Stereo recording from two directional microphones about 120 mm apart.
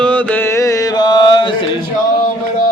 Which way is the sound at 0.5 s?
25° left (ahead or behind).